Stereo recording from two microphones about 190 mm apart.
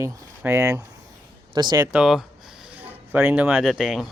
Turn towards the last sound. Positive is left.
turn(degrees=0)  # may be behind; listen again after turning